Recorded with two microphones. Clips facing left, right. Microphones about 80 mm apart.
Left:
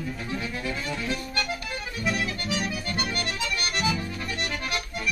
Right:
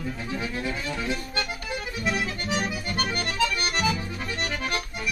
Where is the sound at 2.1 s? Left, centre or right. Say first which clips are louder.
Right 1 dB; right.